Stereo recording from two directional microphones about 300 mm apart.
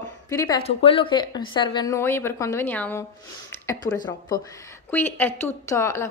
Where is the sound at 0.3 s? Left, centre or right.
Centre.